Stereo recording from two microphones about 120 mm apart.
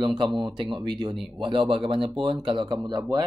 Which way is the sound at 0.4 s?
40° right (ahead or behind).